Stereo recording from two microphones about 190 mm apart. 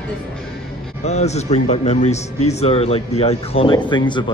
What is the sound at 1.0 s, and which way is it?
Speech, 35° left (ahead or behind).